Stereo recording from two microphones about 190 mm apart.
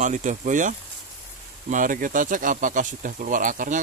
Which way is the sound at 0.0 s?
40° right (ahead or behind).